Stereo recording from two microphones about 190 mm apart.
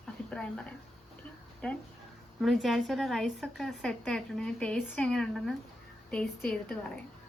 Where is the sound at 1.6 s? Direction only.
5° left (ahead or behind).